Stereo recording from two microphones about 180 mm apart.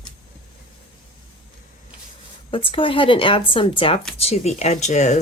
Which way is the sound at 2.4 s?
30° left (ahead or behind).